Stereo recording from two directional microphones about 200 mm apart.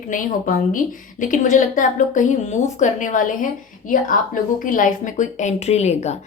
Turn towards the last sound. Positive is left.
turn(degrees=35)  # may be behind; listen again after turning